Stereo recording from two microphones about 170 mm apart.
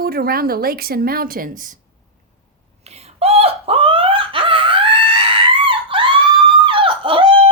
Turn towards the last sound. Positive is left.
turn(degrees=-30)  # may be behind; listen again after turning